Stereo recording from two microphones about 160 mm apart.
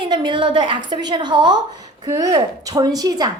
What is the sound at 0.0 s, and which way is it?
A woman's voice, 30° right (ahead or behind).